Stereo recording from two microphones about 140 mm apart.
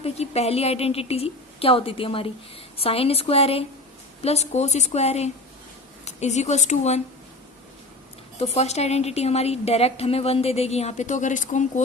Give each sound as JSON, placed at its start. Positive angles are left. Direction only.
{"t": 0.0, "sound": "a woman's voice", "side_deg": 50}
{"t": 8.4, "sound": "a woman's voice", "side_deg": 50}